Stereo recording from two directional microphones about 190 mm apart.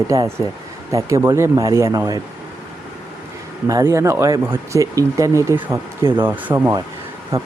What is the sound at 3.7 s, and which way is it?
Speech, 15° right (ahead or behind).